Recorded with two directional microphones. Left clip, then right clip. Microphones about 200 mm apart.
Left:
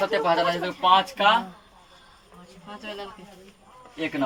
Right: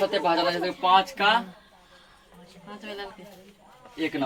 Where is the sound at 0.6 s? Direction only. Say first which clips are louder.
Left 1 dB; 25° left (ahead or behind).